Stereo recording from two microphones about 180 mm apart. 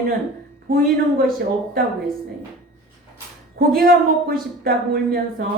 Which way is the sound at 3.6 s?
55° right (ahead or behind).